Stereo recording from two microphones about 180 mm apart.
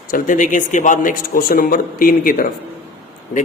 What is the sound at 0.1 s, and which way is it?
A man's voice, 45° left (ahead or behind).